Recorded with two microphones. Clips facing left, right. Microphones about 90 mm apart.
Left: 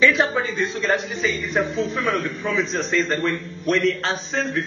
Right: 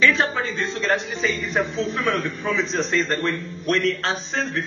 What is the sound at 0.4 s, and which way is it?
A man's voice, centre (ahead or behind).